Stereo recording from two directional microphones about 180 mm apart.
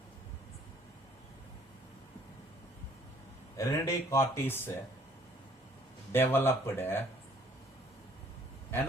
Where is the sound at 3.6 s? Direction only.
15° left (ahead or behind).